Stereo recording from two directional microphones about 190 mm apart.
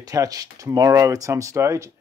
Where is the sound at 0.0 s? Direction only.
20° right (ahead or behind).